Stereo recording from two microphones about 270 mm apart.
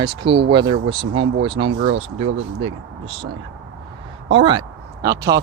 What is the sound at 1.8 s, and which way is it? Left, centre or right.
Speech, right.